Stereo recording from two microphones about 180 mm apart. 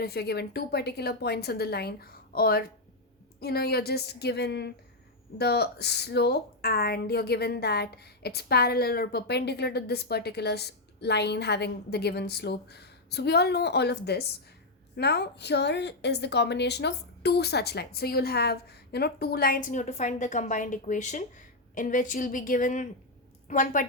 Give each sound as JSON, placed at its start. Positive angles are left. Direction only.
{"t": 0.0, "sound": "a woman's voice", "side_deg": 65}